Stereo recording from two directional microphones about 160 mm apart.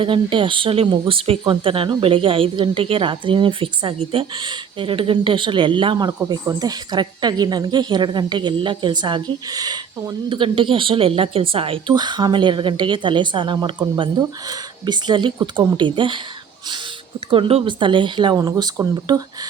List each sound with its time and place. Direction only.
0.0 s a woman's voice: 30° right (ahead or behind)
17.3 s speech: 35° right (ahead or behind)